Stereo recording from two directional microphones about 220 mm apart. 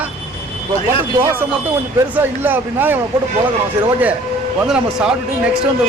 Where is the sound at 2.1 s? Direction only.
10° right (ahead or behind).